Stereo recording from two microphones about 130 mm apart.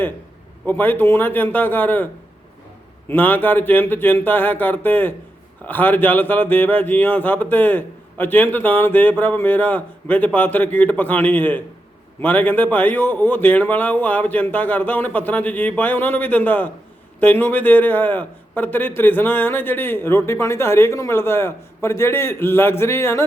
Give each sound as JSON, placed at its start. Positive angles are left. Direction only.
{"t": 0.6, "sound": "a man's voice", "side_deg": 15}
{"t": 3.1, "sound": "a man's voice", "side_deg": 15}